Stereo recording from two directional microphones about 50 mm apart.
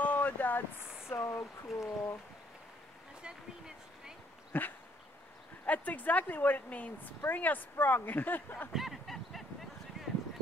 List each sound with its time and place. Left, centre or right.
0.0 s vehicle: left
1.0 s speech: left
3.2 s a sound: centre
4.5 s dog: left
5.7 s speech: left
8.7 s a sound: centre